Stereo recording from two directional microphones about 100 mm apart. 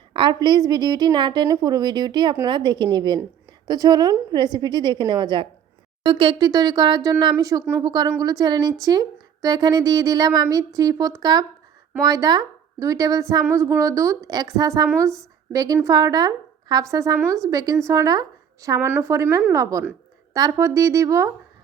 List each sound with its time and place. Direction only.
0.1 s a woman's voice: 55° right (ahead or behind); by 21.3 s 30° right (ahead or behind)